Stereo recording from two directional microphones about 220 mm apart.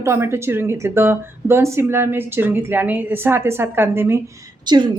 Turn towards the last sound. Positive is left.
turn(degrees=-20)  # may be behind; listen again after turning